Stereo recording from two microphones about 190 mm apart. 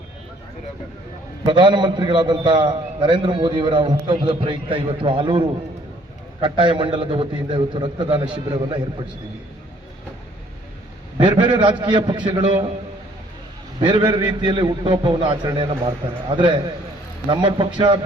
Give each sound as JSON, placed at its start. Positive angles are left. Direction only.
{"t": 1.5, "sound": "a man's voice", "side_deg": -25}
{"t": 11.4, "sound": "a man's voice", "side_deg": -25}
{"t": 13.7, "sound": "a man's voice", "side_deg": -25}